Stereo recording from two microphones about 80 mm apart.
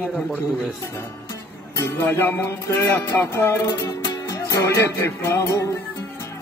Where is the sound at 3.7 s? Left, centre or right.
Left.